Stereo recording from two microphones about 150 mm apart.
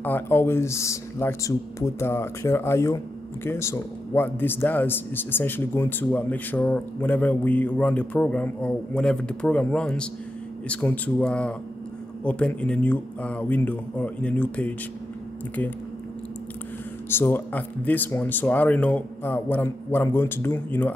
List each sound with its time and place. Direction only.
0.0 s a man's voice: 15° left (ahead or behind)
17.1 s a man's voice: 15° left (ahead or behind)